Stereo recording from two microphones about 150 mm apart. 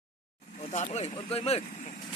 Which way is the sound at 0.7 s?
45° left (ahead or behind).